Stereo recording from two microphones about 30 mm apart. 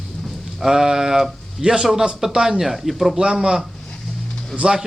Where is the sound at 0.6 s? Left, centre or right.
Centre.